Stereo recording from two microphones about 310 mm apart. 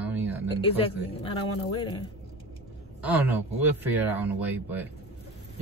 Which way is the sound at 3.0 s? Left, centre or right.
Centre.